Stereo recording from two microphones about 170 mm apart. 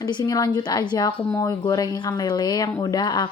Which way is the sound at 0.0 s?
25° left (ahead or behind).